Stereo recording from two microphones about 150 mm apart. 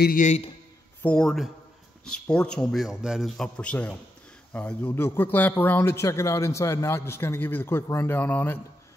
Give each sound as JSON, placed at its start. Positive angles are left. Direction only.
{"t": 0.0, "sound": "a man's voice", "side_deg": 60}
{"t": 1.0, "sound": "a man's voice", "side_deg": 5}